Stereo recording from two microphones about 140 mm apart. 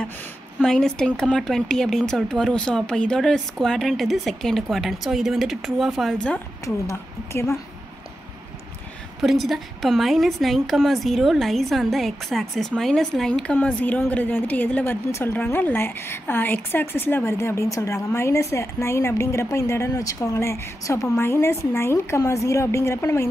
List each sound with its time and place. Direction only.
0.6 s speech: 5° left (ahead or behind)
6.6 s a woman's voice: 20° left (ahead or behind)
9.2 s a woman's voice: centre (ahead or behind); by 23.2 s 20° left (ahead or behind)